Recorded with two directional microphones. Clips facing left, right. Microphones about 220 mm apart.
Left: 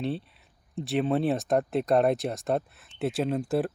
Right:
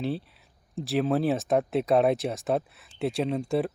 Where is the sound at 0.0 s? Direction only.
Centre (ahead or behind).